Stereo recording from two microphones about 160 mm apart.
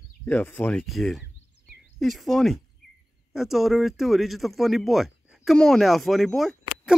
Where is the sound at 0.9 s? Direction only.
Centre (ahead or behind).